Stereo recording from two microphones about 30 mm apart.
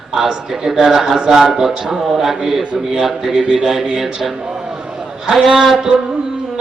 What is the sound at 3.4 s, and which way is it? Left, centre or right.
Speech, right.